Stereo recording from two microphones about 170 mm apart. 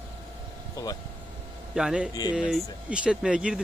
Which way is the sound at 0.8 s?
20° left (ahead or behind).